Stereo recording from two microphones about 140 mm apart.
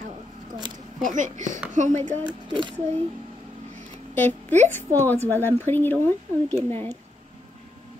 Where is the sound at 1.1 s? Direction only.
65° right (ahead or behind).